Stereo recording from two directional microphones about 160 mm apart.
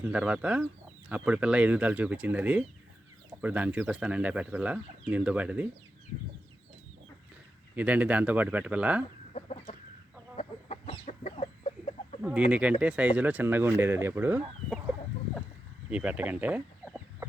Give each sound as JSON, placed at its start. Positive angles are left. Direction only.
{"t": 0.0, "sound": "speech", "side_deg": -10}
{"t": 7.8, "sound": "speech", "side_deg": -10}
{"t": 9.3, "sound": "chicken", "side_deg": 45}
{"t": 10.8, "sound": "chicken", "side_deg": 45}
{"t": 12.2, "sound": "speech", "side_deg": -10}
{"t": 15.9, "sound": "speech", "side_deg": -10}